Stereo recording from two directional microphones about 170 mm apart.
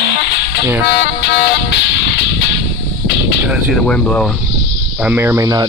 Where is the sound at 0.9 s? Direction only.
90° left.